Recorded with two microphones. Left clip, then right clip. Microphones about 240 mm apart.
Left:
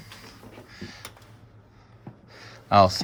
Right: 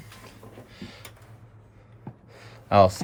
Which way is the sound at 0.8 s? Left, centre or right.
Centre.